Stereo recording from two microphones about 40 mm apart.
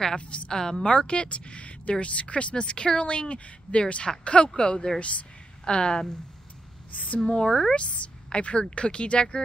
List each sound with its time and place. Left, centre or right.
0.5 s a woman's voice: centre
6.9 s speech: left
7.2 s a woman's voice: left